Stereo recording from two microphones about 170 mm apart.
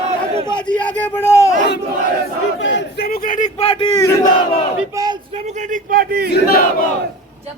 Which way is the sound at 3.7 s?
25° left (ahead or behind).